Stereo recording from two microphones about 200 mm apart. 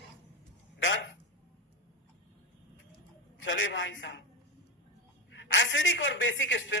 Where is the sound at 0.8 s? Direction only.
70° left (ahead or behind).